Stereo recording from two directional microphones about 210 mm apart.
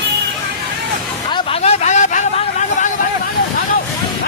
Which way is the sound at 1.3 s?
30° left (ahead or behind).